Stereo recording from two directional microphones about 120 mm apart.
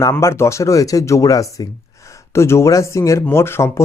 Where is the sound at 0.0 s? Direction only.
25° left (ahead or behind).